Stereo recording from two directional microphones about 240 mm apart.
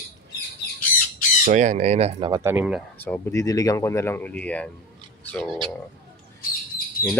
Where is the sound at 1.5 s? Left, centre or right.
Right.